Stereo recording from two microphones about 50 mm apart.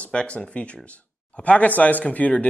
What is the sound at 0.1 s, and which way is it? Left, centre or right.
Speech, left.